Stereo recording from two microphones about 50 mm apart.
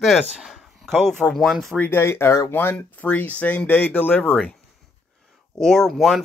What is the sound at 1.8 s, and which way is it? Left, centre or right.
Speech, left.